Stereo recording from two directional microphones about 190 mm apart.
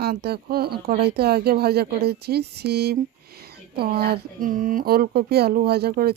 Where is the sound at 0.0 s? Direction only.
55° right (ahead or behind).